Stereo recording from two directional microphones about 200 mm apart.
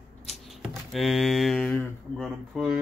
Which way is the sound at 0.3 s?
Centre (ahead or behind).